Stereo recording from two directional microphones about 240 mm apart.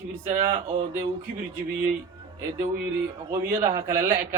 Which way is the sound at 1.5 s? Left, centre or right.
Centre.